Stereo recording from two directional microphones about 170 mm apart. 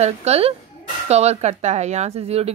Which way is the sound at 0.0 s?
40° right (ahead or behind).